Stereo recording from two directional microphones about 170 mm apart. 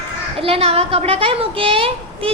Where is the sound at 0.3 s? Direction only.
35° right (ahead or behind).